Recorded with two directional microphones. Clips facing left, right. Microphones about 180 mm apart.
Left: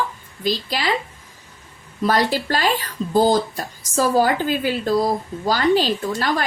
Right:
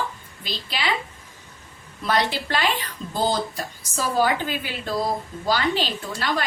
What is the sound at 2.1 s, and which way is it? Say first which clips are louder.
A woman's voice: left 3 dB; 40° left (ahead or behind).